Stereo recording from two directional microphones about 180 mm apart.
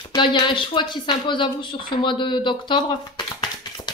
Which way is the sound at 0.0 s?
25° left (ahead or behind).